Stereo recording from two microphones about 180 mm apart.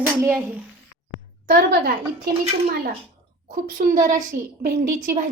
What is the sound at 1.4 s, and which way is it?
Speech, 55° right (ahead or behind).